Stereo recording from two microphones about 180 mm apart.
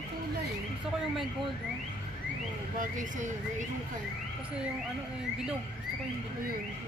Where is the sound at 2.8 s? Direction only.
45° right (ahead or behind).